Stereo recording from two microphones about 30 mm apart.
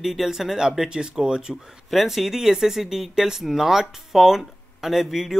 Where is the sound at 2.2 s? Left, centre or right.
Centre.